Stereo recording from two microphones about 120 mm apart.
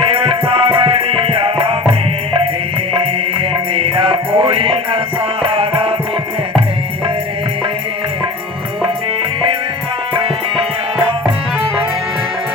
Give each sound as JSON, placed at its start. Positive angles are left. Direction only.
{"t": 0.0, "sound": "music", "side_deg": -50}
{"t": 3.8, "sound": "music", "side_deg": -50}